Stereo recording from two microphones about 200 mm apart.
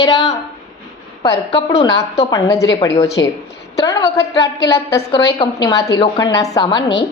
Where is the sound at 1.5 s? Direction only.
30° left (ahead or behind).